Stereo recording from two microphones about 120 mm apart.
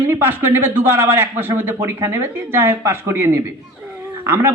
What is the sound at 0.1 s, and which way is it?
A man's voice, 20° right (ahead or behind).